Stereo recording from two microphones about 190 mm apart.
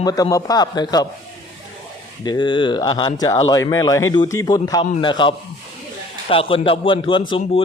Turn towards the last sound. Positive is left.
turn(degrees=30)  # may be behind; listen again after turning